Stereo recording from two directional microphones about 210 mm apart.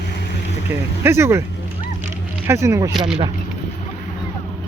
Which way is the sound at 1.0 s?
10° right (ahead or behind).